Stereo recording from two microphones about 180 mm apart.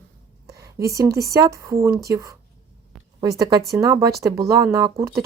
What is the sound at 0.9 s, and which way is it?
A woman's voice, 20° right (ahead or behind).